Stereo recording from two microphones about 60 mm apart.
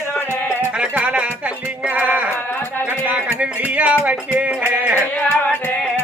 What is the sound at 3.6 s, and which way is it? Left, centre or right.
Speech, right.